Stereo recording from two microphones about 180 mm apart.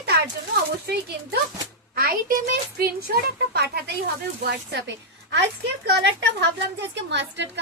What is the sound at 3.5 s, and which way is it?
Speech, 60° right (ahead or behind).